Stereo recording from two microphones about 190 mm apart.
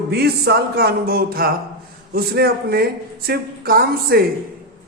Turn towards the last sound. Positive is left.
turn(degrees=-55)  # may be behind; listen again after turning